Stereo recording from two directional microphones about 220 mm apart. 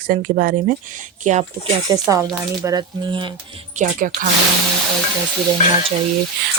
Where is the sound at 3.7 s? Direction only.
40° right (ahead or behind).